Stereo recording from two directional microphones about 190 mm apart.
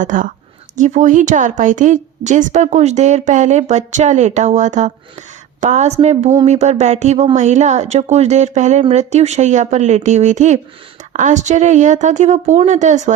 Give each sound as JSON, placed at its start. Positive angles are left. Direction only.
{"t": 0.0, "sound": "a woman's voice", "side_deg": -40}